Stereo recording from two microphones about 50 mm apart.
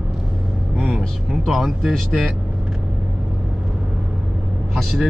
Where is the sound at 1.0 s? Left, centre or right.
Centre.